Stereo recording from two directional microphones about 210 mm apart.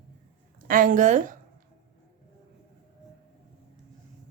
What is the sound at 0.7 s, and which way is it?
Speech, 40° right (ahead or behind).